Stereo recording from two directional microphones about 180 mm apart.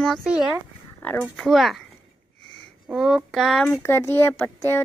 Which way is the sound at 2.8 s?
Centre (ahead or behind).